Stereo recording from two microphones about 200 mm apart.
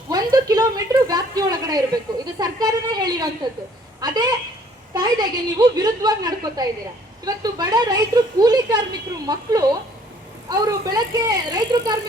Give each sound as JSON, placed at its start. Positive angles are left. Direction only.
{"t": 0.1, "sound": "a woman's voice", "side_deg": -20}